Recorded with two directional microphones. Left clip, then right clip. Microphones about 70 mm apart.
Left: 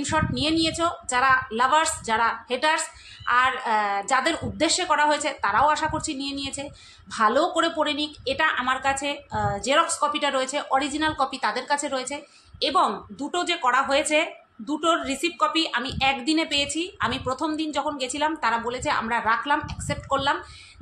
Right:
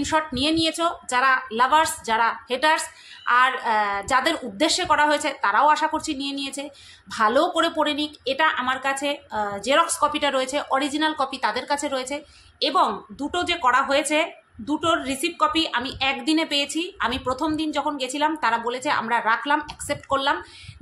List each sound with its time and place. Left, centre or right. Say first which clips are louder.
0.0 s a woman's voice: right 2 dB; right
9.8 s a woman's voice: right 2 dB; right